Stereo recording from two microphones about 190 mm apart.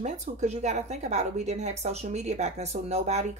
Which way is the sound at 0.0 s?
40° right (ahead or behind).